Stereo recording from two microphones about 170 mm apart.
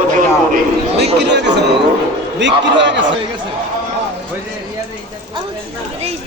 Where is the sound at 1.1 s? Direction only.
90° right.